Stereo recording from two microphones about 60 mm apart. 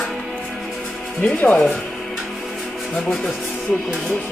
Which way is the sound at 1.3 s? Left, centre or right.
Left.